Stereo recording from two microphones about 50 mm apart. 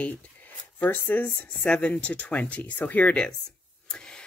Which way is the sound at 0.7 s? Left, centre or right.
Left.